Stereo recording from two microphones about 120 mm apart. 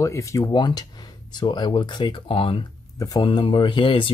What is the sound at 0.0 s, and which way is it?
Speech, 25° left (ahead or behind).